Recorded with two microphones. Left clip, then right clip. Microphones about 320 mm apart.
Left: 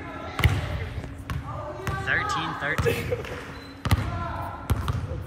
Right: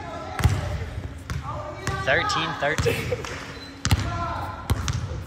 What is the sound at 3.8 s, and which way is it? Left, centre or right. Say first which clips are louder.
Basketball bounce: right 2 dB; left.